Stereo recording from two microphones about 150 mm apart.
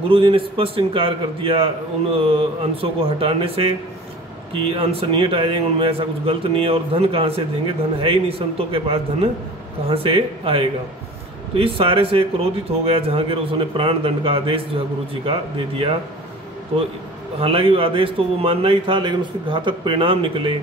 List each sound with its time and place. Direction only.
0.1 s a man's voice: 35° right (ahead or behind)
4.7 s a man's voice: 35° right (ahead or behind)
17.4 s a man's voice: 40° right (ahead or behind)